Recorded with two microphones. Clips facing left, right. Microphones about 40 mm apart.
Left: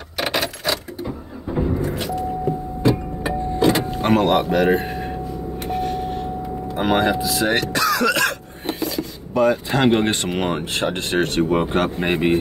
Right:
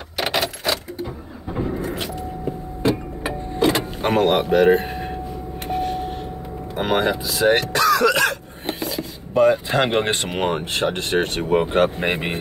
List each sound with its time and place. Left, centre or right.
2.8 s vehicle: right
4.0 s speech: centre
5.7 s vehicle: centre
6.8 s speech: centre